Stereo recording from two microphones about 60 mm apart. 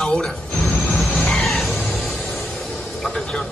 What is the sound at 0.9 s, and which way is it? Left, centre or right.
Chicken, centre.